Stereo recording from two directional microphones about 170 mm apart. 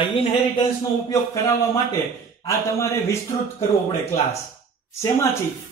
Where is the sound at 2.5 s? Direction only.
15° left (ahead or behind).